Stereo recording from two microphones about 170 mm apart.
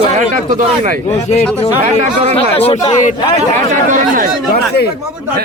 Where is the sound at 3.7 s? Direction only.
50° right (ahead or behind).